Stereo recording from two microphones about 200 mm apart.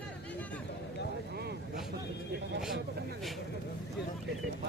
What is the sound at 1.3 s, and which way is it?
Vehicle, 55° right (ahead or behind).